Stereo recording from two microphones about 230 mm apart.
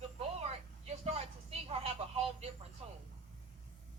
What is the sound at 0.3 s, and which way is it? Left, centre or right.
Vehicle, right.